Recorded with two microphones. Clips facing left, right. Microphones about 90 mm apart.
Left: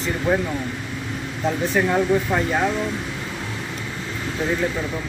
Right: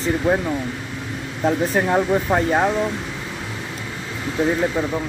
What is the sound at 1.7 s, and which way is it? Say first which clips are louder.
Speech: right 1 dB; 30° right (ahead or behind).